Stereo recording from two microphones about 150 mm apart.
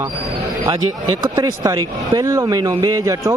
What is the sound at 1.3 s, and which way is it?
A man's voice, 25° right (ahead or behind).